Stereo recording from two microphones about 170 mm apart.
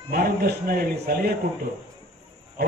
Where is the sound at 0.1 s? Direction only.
65° right (ahead or behind).